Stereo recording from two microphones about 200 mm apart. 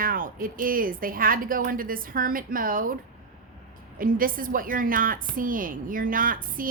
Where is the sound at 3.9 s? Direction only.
45° right (ahead or behind).